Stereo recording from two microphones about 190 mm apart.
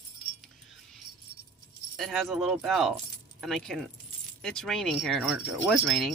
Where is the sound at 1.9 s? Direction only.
Centre (ahead or behind).